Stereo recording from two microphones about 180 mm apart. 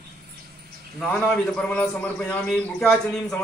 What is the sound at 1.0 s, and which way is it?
A man's voice, 5° left (ahead or behind).